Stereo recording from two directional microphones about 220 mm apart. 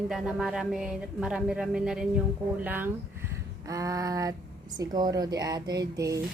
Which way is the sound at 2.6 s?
10° right (ahead or behind).